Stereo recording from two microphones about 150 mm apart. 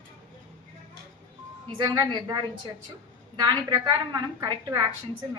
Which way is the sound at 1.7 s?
25° right (ahead or behind).